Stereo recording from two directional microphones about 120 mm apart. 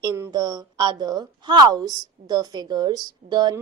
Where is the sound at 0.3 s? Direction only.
35° right (ahead or behind).